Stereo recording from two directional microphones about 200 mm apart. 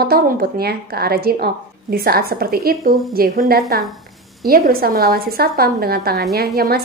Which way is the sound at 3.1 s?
50° right (ahead or behind).